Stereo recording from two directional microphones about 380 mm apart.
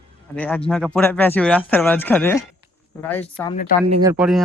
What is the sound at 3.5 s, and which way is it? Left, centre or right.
Speech, left.